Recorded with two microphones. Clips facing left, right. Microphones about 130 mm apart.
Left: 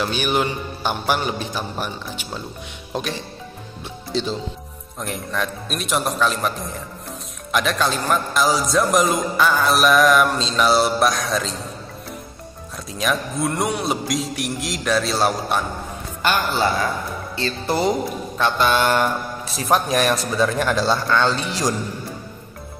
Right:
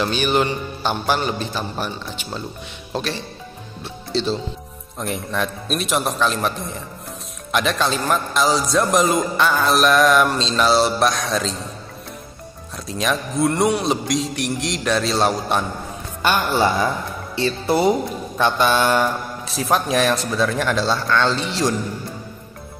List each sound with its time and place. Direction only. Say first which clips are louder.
0.0 s a man's voice: right 2 dB; 10° left (ahead or behind)
3.8 s music: right 2 dB; 15° left (ahead or behind)
4.9 s a man's voice: right 2 dB; centre (ahead or behind)
12.8 s a man's voice: right 1 dB; centre (ahead or behind)
16.3 s speech: right 2 dB; 15° right (ahead or behind)
19.5 s a man's voice: even; centre (ahead or behind)